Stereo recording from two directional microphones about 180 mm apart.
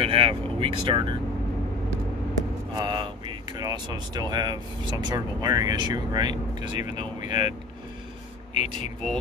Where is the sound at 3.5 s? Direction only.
20° right (ahead or behind).